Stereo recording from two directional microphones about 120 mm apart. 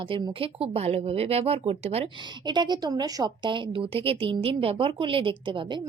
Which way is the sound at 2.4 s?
40° right (ahead or behind).